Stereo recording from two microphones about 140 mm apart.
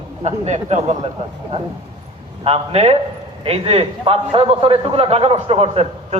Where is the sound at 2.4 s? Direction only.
50° right (ahead or behind).